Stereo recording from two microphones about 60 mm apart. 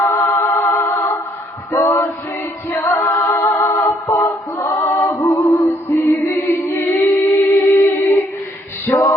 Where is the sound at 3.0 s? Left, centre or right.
Left.